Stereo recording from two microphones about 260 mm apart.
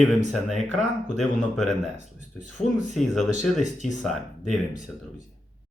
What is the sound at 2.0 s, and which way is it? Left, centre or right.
Speech, right.